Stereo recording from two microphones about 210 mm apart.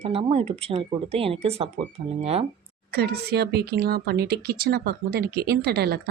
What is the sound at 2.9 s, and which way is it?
Speech, 50° right (ahead or behind).